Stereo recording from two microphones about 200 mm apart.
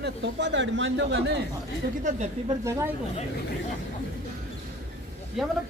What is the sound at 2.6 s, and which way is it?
Speech, 15° right (ahead or behind).